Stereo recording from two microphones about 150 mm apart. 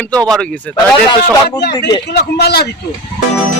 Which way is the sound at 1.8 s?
30° left (ahead or behind).